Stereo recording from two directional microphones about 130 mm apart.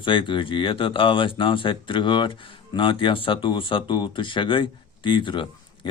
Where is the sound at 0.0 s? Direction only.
40° left (ahead or behind).